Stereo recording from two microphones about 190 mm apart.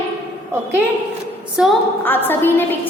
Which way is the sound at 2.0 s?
10° left (ahead or behind).